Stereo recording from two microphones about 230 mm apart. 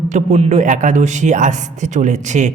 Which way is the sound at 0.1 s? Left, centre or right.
Right.